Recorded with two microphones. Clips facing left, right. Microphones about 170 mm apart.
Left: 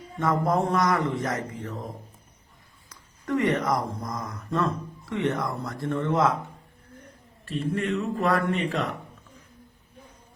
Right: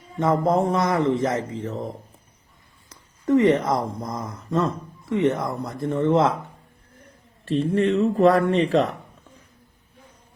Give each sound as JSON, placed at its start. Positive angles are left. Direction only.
{"t": 0.2, "sound": "speech", "side_deg": -25}
{"t": 2.9, "sound": "speech", "side_deg": -20}
{"t": 7.5, "sound": "speech", "side_deg": -35}